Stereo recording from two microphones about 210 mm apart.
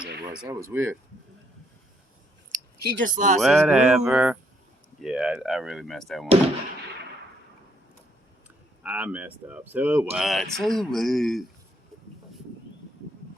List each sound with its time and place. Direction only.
0.7 s speech: 10° right (ahead or behind)
2.8 s speech: 40° right (ahead or behind)
3.4 s speech: centre (ahead or behind)
8.8 s speech: 5° right (ahead or behind)